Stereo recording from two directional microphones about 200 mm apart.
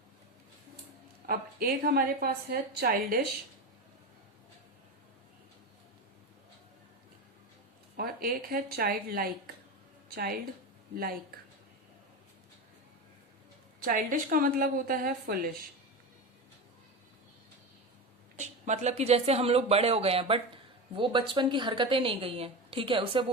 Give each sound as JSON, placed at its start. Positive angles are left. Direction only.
{"t": 1.3, "sound": "a woman's voice", "side_deg": -50}
{"t": 7.9, "sound": "a woman's voice", "side_deg": -50}
{"t": 13.8, "sound": "a woman's voice", "side_deg": -45}
{"t": 18.3, "sound": "a woman's voice", "side_deg": -35}